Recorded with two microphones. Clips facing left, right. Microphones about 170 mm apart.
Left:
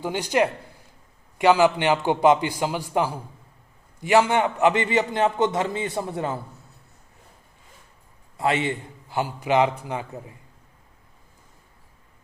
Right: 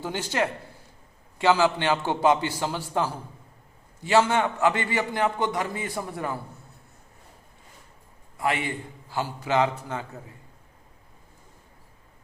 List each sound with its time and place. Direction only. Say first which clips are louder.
0.0 s a man's voice: left 5 dB; 15° left (ahead or behind)
8.4 s a man's voice: left 4 dB; 25° left (ahead or behind)